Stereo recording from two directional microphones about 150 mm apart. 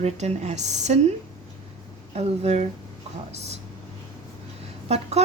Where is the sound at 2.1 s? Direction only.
45° right (ahead or behind).